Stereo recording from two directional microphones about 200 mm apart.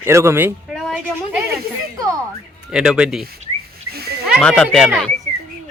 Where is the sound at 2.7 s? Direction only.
5° right (ahead or behind).